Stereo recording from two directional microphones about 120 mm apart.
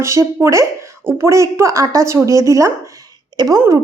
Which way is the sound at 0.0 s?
25° right (ahead or behind).